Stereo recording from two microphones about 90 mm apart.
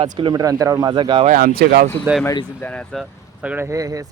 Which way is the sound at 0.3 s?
45° right (ahead or behind).